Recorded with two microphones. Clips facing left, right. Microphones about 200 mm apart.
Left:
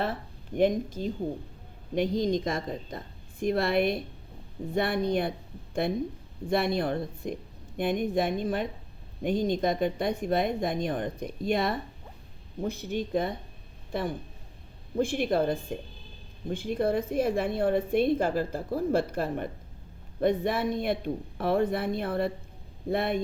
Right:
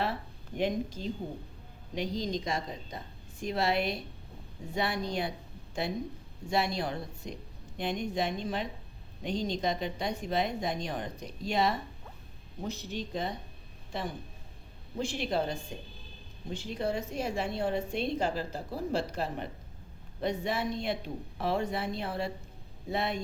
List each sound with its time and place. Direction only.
0.0 s a woman's voice: 50° left (ahead or behind)